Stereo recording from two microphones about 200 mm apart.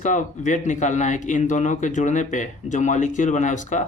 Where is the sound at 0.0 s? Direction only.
40° left (ahead or behind).